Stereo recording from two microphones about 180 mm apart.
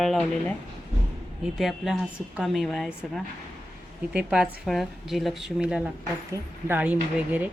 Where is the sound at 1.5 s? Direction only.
Centre (ahead or behind).